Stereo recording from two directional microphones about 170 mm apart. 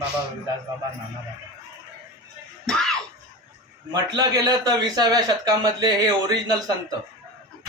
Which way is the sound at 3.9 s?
25° right (ahead or behind).